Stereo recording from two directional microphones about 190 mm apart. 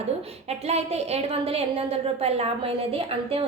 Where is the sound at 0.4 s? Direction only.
35° right (ahead or behind).